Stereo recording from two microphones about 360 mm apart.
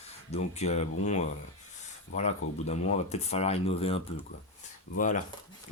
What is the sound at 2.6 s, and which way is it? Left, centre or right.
Speech, centre.